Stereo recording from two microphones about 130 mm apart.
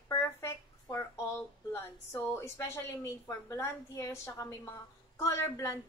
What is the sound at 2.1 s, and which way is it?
A woman's voice, 25° left (ahead or behind).